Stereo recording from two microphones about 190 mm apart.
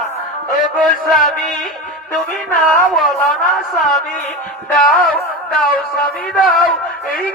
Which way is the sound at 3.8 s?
Centre (ahead or behind).